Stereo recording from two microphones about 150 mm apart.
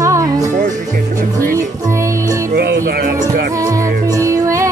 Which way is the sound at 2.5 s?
90° right.